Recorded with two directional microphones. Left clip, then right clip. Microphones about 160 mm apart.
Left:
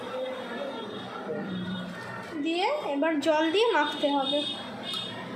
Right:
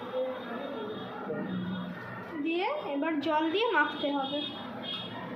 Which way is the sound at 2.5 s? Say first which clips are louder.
Left 4 dB; 55° left (ahead or behind).